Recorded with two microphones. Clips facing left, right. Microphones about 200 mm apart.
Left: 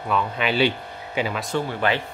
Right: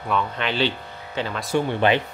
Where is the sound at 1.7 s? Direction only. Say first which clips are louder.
Right 5 dB; 20° right (ahead or behind).